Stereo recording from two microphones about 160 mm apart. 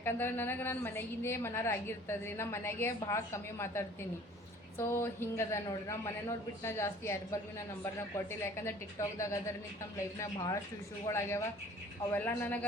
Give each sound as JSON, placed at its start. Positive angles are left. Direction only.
{"t": 0.0, "sound": "a woman's voice", "side_deg": 15}